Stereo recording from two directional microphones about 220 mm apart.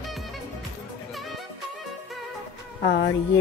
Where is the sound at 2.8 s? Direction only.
50° left (ahead or behind).